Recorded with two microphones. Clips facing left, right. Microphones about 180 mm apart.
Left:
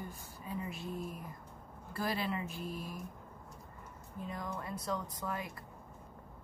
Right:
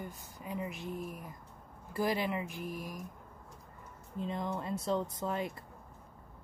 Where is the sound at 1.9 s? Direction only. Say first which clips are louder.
Right 4 dB; 15° right (ahead or behind).